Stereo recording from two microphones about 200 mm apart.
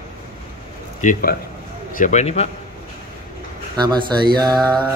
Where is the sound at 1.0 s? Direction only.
45° left (ahead or behind).